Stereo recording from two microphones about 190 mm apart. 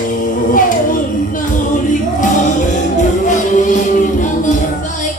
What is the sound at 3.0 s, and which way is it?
Music, 40° left (ahead or behind).